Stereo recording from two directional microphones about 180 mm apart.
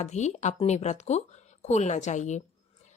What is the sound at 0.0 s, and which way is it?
A woman's voice, 40° left (ahead or behind).